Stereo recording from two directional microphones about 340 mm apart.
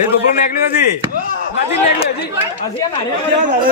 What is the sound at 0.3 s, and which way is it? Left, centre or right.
Speech, left.